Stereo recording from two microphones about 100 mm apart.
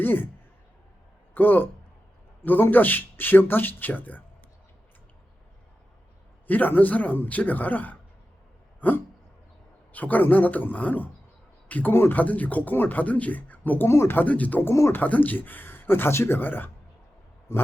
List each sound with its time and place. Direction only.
0.0 s speech: 20° left (ahead or behind)
1.3 s a man's voice: 20° left (ahead or behind)
6.5 s speech: 15° left (ahead or behind)
9.9 s speech: 15° left (ahead or behind)
15.0 s speech: 15° left (ahead or behind)